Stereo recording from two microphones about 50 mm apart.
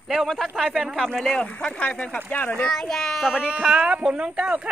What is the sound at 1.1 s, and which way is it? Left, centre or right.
Speech, centre.